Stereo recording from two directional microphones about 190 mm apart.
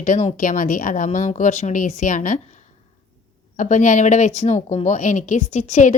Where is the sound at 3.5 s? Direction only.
40° left (ahead or behind).